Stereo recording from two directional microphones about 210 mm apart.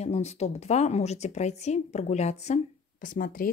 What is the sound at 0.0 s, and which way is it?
A woman's voice, 30° left (ahead or behind).